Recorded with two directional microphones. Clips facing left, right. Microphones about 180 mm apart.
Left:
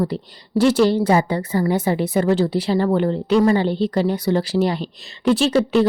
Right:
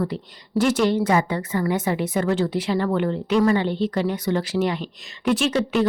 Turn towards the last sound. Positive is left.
turn(degrees=30)  # may be behind; listen again after turning